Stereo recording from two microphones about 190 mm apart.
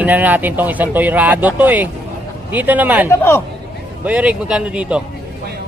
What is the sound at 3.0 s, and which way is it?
Speech, 15° left (ahead or behind).